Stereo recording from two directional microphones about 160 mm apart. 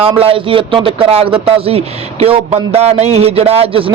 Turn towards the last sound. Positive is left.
turn(degrees=-35)  # may be behind; listen again after turning